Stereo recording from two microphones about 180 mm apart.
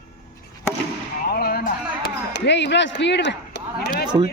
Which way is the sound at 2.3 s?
75° left (ahead or behind).